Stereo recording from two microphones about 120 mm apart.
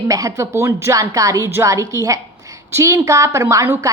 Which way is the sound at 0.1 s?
30° right (ahead or behind).